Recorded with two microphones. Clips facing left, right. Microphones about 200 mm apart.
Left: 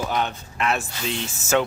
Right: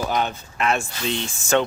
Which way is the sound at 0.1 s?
Centre (ahead or behind).